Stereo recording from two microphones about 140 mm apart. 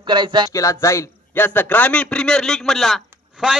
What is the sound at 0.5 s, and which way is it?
A man's voice, 20° left (ahead or behind).